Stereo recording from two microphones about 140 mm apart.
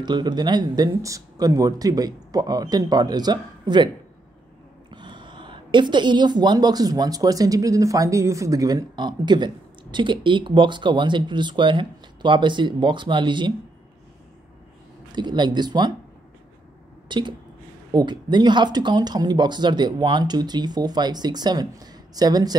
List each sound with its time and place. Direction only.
0.0 s speech: 30° right (ahead or behind)
4.9 s speech: 35° right (ahead or behind)
15.1 s speech: 35° right (ahead or behind)
17.1 s speech: 35° right (ahead or behind)